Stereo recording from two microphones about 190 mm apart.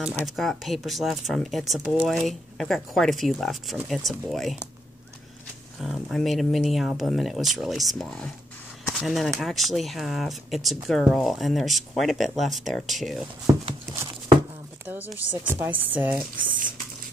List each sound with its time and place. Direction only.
0.1 s speech: centre (ahead or behind)
5.8 s speech: centre (ahead or behind)
14.9 s speech: 10° right (ahead or behind)